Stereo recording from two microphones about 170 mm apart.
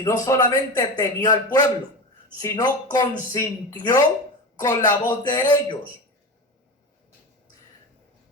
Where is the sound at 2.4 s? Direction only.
20° left (ahead or behind).